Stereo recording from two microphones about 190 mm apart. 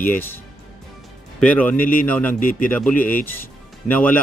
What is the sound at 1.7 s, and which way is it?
Speech, 45° left (ahead or behind).